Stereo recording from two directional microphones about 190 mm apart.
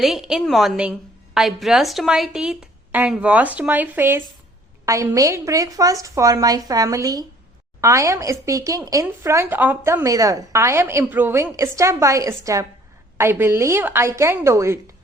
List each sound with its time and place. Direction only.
0.0 s a woman's voice: centre (ahead or behind)